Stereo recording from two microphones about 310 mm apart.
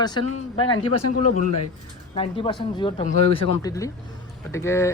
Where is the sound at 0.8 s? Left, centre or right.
Left.